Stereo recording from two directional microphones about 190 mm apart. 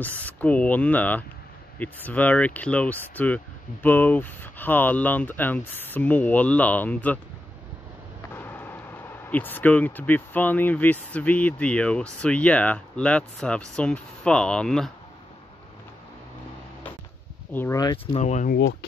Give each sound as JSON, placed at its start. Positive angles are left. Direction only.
{"t": 0.2, "sound": "speech", "side_deg": 10}
{"t": 8.4, "sound": "speech", "side_deg": 10}
{"t": 17.5, "sound": "speech", "side_deg": 10}
{"t": 18.1, "sound": "speech", "side_deg": 40}